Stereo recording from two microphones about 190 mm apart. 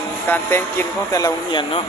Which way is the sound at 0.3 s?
10° left (ahead or behind).